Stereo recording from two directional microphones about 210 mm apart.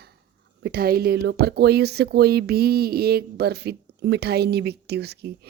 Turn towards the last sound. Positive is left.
turn(degrees=-50)  # may be behind; listen again after turning